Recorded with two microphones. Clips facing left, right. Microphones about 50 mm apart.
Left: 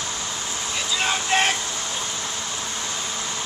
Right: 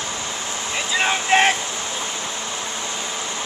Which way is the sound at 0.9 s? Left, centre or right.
Right.